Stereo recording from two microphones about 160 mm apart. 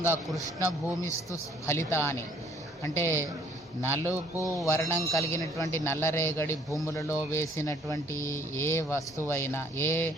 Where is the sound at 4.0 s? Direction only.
15° right (ahead or behind).